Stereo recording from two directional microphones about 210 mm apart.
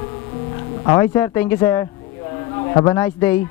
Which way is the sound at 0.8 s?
15° left (ahead or behind).